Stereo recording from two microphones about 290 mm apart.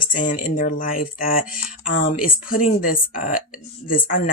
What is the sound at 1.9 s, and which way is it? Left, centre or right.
Speech, left.